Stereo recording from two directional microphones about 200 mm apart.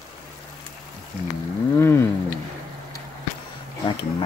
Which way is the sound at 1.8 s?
10° left (ahead or behind).